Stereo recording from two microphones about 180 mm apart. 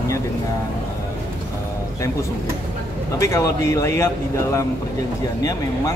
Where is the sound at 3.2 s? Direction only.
15° left (ahead or behind).